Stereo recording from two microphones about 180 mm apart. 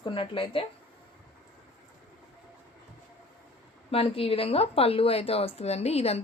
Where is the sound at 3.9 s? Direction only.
30° left (ahead or behind).